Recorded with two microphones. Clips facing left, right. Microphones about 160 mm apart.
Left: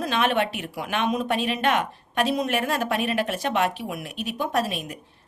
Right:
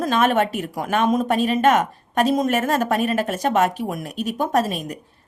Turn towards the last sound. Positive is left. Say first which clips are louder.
# right 5 dB
turn(degrees=-40)  # may be behind; listen again after turning